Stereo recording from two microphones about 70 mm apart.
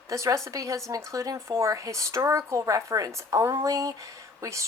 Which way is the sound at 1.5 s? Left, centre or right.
Right.